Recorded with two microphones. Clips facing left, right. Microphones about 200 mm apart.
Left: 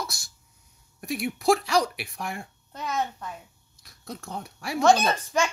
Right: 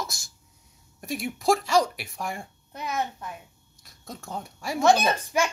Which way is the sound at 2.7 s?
10° right (ahead or behind).